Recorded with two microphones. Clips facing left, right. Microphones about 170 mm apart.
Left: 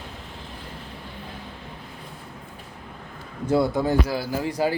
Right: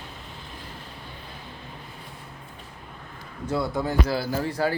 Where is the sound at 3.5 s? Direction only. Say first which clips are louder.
Left 5 dB; 20° left (ahead or behind).